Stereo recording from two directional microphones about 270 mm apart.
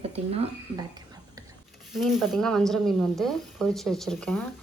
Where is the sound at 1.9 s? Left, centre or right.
Centre.